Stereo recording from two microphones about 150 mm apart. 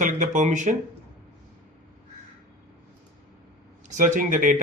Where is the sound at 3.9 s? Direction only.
55° right (ahead or behind).